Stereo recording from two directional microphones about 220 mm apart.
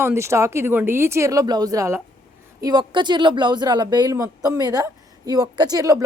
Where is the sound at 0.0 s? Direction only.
10° right (ahead or behind).